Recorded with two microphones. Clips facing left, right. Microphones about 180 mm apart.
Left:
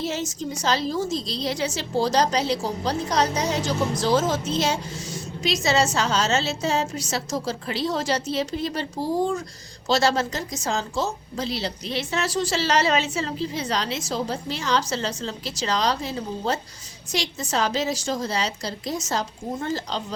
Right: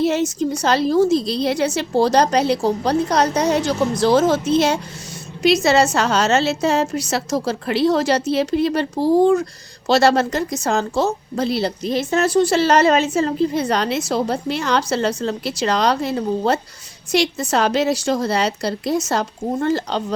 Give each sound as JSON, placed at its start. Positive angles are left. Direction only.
{"t": 0.0, "sound": "a woman's voice", "side_deg": -60}